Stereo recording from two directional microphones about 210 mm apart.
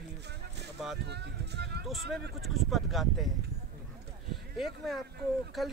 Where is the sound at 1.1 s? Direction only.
50° right (ahead or behind).